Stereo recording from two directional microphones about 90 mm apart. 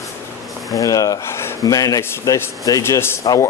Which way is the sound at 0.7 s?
40° left (ahead or behind).